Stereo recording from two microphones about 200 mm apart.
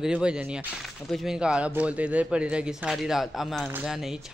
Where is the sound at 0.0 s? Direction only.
5° right (ahead or behind).